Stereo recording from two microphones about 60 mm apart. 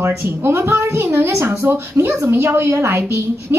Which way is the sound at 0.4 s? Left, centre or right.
Right.